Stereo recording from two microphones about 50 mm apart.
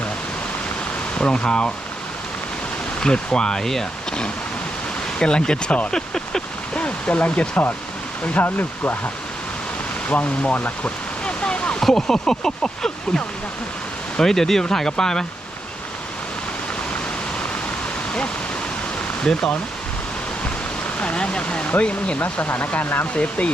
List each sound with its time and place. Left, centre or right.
1.2 s speech: centre
3.0 s speech: centre
5.2 s speech: centre
6.7 s speech: left
8.4 s speech: left
10.1 s speech: left
11.3 s waterfall: left
11.8 s speech: centre
19.2 s speech: centre
21.0 s speech: left
22.4 s speech: left